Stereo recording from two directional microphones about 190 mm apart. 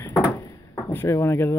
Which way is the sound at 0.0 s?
15° left (ahead or behind).